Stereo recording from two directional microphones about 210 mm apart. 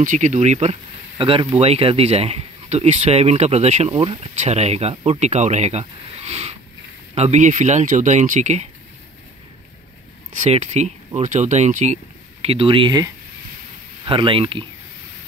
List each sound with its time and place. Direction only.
0.0 s speech: 35° right (ahead or behind)
10.4 s speech: 35° right (ahead or behind)